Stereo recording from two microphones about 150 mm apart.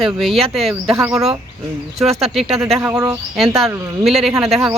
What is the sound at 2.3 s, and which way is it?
Speech, centre (ahead or behind).